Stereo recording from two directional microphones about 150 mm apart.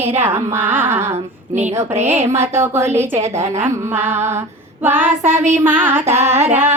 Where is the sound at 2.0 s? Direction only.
15° right (ahead or behind).